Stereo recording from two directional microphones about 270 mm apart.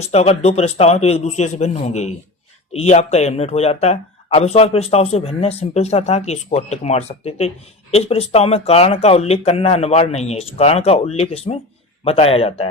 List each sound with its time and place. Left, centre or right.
0.0 s speech: left